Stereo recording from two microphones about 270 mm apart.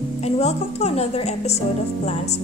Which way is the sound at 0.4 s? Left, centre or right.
Left.